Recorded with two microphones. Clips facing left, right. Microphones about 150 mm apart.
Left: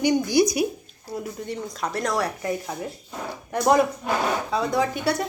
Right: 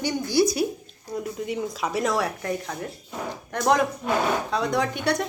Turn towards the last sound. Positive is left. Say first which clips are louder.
# left 1 dB
turn(degrees=5)  # may be behind; listen again after turning